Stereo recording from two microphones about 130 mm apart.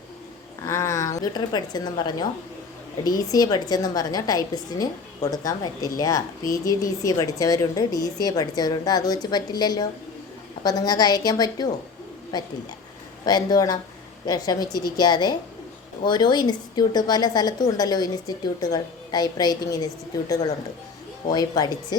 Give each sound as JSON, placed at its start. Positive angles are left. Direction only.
{"t": 0.6, "sound": "a woman's voice", "side_deg": 20}
{"t": 3.3, "sound": "a woman's voice", "side_deg": 30}
{"t": 13.2, "sound": "a woman's voice", "side_deg": 30}